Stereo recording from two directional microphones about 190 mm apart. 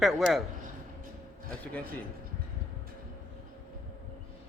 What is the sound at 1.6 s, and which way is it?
Speech, 5° left (ahead or behind).